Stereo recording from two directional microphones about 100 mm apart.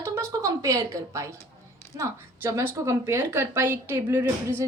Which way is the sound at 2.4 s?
25° right (ahead or behind).